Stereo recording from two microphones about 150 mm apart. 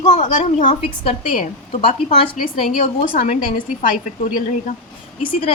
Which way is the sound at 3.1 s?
65° left (ahead or behind).